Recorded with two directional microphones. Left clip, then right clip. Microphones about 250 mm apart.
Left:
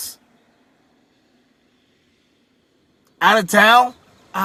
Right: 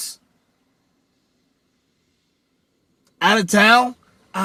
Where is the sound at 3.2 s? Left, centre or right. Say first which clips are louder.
Left 2 dB; left.